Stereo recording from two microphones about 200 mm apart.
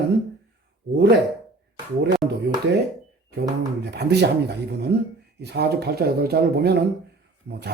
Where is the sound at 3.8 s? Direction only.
55° right (ahead or behind).